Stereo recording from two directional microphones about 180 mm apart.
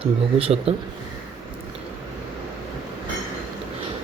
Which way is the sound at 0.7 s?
35° right (ahead or behind).